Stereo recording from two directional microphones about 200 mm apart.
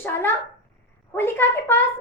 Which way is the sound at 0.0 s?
10° left (ahead or behind).